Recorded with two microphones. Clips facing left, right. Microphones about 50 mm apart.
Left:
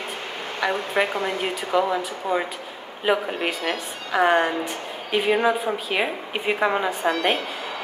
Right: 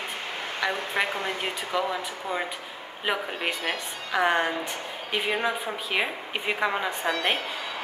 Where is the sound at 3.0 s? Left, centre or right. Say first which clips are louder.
Left 6 dB; centre.